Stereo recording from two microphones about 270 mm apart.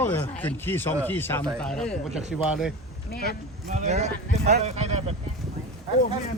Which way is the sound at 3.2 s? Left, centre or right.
Right.